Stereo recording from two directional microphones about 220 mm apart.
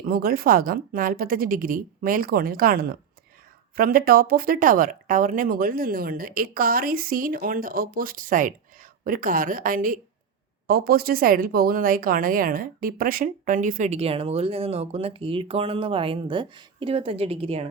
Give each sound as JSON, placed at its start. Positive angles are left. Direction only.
{"t": 0.0, "sound": "speech", "side_deg": -40}